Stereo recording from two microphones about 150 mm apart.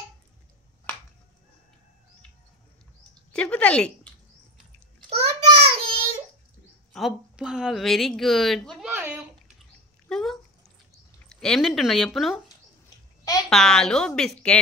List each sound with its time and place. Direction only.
3.3 s speech: 10° left (ahead or behind)
5.1 s child singing: 45° right (ahead or behind)
6.9 s a woman's voice: centre (ahead or behind)
8.8 s a sound: 10° right (ahead or behind)
10.0 s a sound: centre (ahead or behind)
11.2 s a woman's voice: 5° left (ahead or behind)
13.5 s a woman's voice: 5° left (ahead or behind)